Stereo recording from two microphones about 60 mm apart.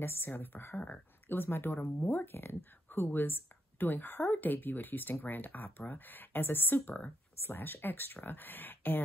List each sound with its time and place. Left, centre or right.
0.0 s speech: left
1.4 s speech: left